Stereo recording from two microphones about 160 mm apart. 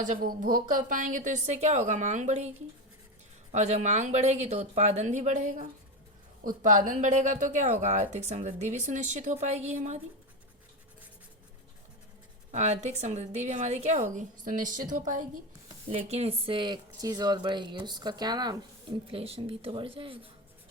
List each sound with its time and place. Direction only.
0.0 s a woman's voice: 60° right (ahead or behind)
3.5 s a woman's voice: 45° right (ahead or behind)
12.5 s a woman's voice: 45° right (ahead or behind)
15.9 s speech: 40° right (ahead or behind)